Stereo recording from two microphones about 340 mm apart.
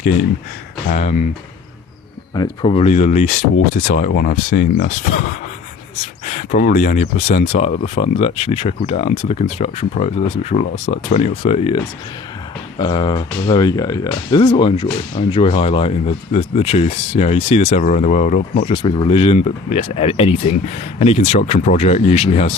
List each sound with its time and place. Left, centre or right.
0.9 s speech: left
2.3 s speech: centre
12.8 s speech: centre